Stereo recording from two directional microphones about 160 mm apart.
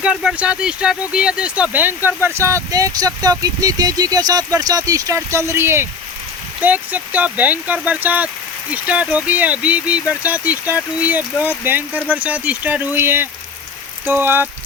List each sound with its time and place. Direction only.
0.0 s speech: 5° right (ahead or behind)